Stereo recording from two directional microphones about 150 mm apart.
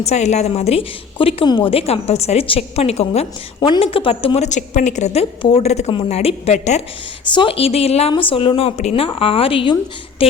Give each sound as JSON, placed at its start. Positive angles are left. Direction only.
{"t": 0.0, "sound": "a woman's voice", "side_deg": 50}
{"t": 7.3, "sound": "speech", "side_deg": 40}